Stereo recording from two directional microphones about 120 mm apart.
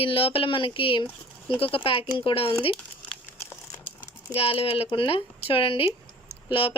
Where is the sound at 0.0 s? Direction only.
50° left (ahead or behind).